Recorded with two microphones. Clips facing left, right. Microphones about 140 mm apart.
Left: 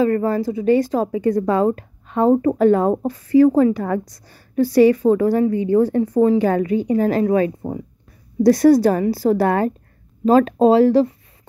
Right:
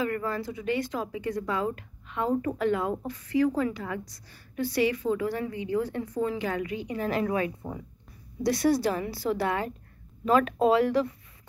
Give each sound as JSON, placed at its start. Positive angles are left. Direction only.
{"t": 0.0, "sound": "a woman's voice", "side_deg": 35}
{"t": 10.2, "sound": "speech", "side_deg": 35}